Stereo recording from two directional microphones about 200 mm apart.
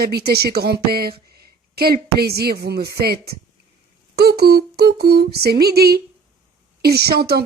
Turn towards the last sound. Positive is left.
turn(degrees=-50)  # may be behind; listen again after turning